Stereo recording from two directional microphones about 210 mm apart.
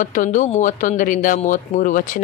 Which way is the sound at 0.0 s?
40° left (ahead or behind).